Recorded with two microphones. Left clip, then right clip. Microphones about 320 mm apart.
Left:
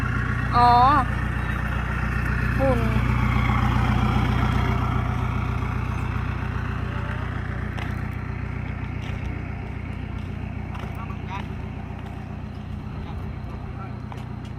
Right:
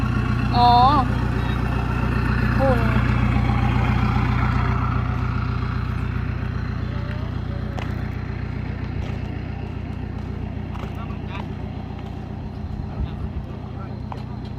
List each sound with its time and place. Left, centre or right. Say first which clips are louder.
0.0 s vehicle: right 1 dB; right
0.6 s speech: right 1 dB; centre
1.3 s vehicle: right 2 dB; right; by 5.7 s centre